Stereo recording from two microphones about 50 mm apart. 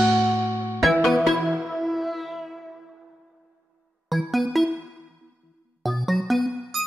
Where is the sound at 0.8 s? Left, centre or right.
Centre.